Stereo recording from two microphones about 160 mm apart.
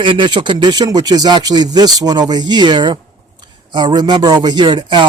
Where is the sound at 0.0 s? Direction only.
30° right (ahead or behind).